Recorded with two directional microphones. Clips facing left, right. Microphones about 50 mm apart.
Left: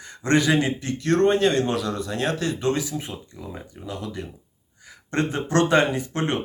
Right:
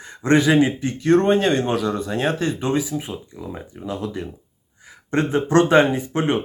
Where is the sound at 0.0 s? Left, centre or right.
Right.